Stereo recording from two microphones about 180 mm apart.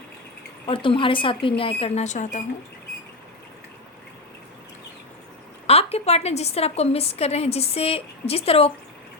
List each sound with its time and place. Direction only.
0.7 s speech: 30° left (ahead or behind)
5.6 s a woman's voice: 35° left (ahead or behind)